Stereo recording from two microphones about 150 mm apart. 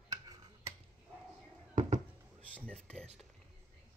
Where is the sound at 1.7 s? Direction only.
55° right (ahead or behind).